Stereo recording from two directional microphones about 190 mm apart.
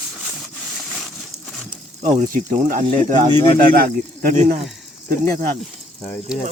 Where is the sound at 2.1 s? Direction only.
40° right (ahead or behind).